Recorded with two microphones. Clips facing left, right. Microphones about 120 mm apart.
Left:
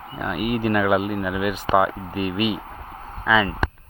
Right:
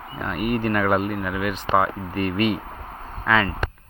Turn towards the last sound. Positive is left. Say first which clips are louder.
# left 1 dB
turn(degrees=5)  # may be behind; listen again after turning